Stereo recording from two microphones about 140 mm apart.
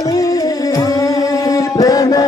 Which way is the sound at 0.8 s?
25° left (ahead or behind).